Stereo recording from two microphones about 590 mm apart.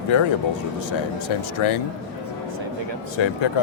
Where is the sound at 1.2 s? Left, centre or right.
Left.